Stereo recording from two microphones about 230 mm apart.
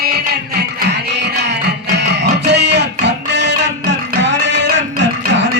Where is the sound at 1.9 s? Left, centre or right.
Right.